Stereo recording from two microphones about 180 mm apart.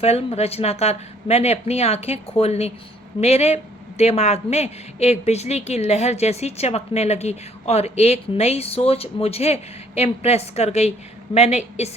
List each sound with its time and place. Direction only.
0.0 s speech: 35° left (ahead or behind)